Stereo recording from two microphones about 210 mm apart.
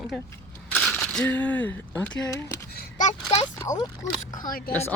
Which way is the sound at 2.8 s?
35° left (ahead or behind).